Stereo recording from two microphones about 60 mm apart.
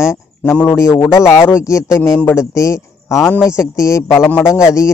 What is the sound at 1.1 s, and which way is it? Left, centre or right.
Speech, left.